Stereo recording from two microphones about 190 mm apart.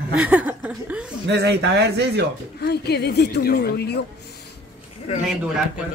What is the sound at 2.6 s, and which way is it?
Speech, 60° left (ahead or behind).